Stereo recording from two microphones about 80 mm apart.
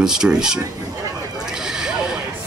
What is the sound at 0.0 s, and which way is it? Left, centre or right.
Speech, centre.